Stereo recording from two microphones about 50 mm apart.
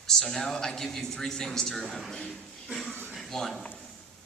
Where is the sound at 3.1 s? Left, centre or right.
Centre.